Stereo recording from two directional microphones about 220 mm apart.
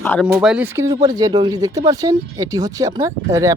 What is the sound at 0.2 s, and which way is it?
Speech, 5° right (ahead or behind).